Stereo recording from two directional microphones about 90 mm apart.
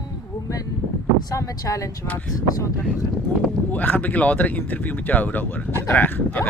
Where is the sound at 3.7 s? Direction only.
20° left (ahead or behind).